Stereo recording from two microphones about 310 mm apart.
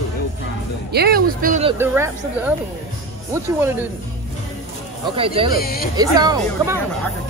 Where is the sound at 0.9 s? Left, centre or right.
Right.